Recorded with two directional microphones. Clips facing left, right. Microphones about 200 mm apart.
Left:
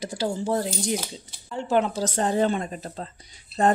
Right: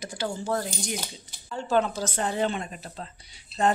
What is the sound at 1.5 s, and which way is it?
Speech, 20° left (ahead or behind).